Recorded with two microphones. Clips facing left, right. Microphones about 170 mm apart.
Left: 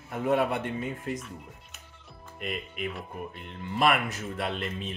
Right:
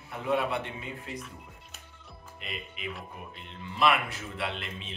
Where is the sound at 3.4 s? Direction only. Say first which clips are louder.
Left 1 dB; 50° left (ahead or behind).